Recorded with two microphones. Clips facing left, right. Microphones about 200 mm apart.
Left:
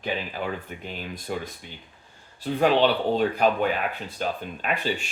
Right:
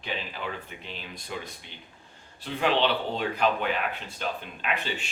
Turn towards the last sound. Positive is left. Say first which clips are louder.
# left 4 dB
turn(degrees=45)  # may be behind; listen again after turning